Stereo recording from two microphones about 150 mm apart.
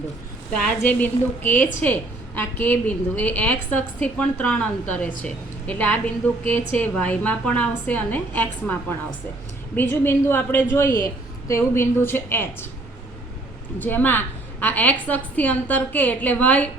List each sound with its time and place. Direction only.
0.5 s a woman's voice: 10° left (ahead or behind)
13.7 s a woman's voice: 10° left (ahead or behind)